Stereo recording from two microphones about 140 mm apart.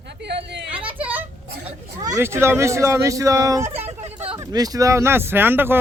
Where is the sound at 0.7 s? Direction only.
10° right (ahead or behind).